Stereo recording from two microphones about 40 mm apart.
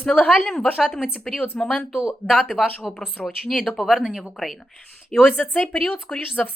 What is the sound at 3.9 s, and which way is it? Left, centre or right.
Speech, centre.